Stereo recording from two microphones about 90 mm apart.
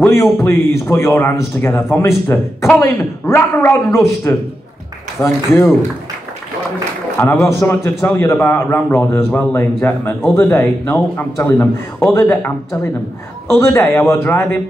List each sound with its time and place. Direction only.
0.1 s a man's voice: 30° left (ahead or behind)
7.2 s a man's voice: 25° left (ahead or behind)